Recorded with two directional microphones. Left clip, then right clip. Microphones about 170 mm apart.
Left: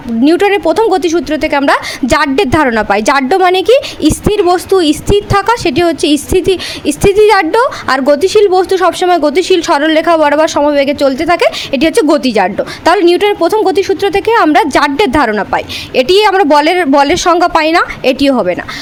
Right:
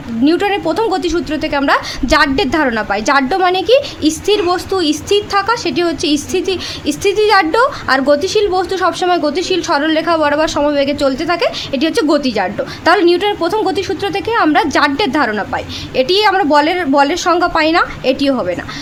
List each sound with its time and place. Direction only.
0.2 s a woman's voice: 40° left (ahead or behind)